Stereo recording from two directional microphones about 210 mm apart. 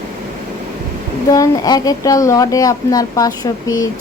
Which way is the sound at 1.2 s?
15° left (ahead or behind).